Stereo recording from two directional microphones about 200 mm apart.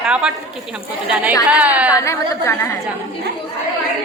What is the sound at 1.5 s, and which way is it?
Speech, 5° right (ahead or behind).